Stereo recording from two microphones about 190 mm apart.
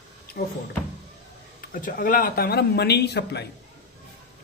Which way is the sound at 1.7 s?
45° left (ahead or behind).